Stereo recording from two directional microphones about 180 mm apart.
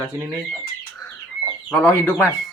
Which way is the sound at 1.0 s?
20° left (ahead or behind).